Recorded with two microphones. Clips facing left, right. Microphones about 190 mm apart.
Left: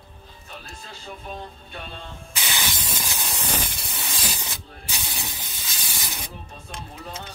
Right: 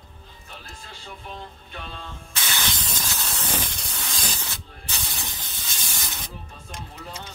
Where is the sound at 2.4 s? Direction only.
10° left (ahead or behind).